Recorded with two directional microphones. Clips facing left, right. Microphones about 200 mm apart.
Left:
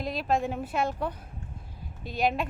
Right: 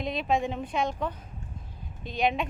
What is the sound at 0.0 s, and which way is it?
A woman's voice, centre (ahead or behind).